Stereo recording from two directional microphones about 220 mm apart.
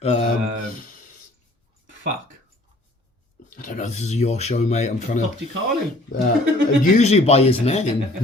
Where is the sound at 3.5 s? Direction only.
35° left (ahead or behind).